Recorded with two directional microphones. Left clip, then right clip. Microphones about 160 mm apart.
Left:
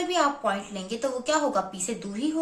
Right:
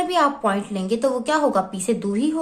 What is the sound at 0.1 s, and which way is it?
A woman's voice, 50° right (ahead or behind).